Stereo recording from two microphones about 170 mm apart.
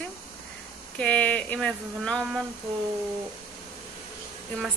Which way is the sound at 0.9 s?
5° left (ahead or behind).